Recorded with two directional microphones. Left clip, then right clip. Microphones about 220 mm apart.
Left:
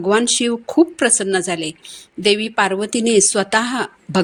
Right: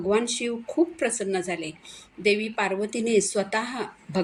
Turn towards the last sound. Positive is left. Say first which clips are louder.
# left 9 dB
turn(degrees=45)  # may be behind; listen again after turning